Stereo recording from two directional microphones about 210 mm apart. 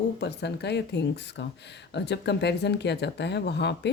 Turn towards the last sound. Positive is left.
turn(degrees=55)  # may be behind; listen again after turning